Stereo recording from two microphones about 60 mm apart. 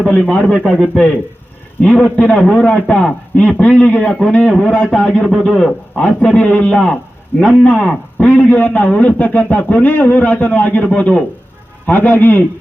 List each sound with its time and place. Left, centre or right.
0.0 s a man's voice: centre
0.5 s speech: centre
1.8 s a man's voice: centre
8.3 s a man's voice: left